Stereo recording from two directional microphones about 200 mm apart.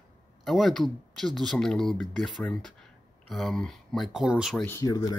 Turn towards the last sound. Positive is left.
turn(degrees=15)  # may be behind; listen again after turning